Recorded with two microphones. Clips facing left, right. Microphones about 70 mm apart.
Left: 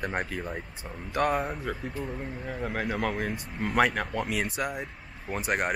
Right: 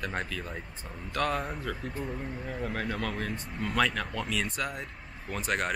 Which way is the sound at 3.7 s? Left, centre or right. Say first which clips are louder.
Left 4 dB; centre.